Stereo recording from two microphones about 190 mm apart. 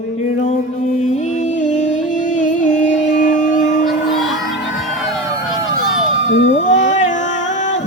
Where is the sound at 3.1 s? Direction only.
40° left (ahead or behind).